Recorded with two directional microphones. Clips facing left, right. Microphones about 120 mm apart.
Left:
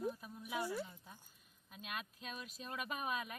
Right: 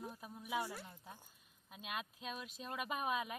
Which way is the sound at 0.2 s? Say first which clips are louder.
Even; 25° right (ahead or behind).